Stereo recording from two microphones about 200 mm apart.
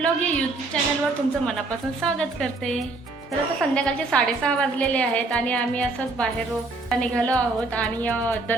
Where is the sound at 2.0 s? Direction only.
5° left (ahead or behind).